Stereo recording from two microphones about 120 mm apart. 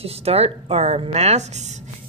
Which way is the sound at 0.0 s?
60° right (ahead or behind).